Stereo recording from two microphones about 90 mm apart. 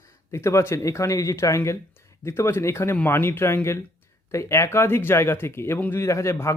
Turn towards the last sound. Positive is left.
turn(degrees=30)  # may be behind; listen again after turning